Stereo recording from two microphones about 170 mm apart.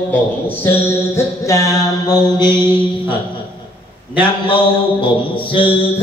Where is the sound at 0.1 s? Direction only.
10° left (ahead or behind).